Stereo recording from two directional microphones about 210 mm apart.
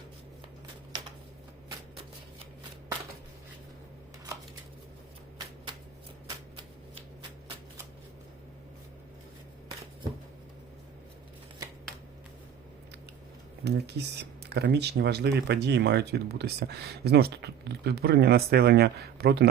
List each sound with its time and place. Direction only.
13.7 s speech: 50° right (ahead or behind)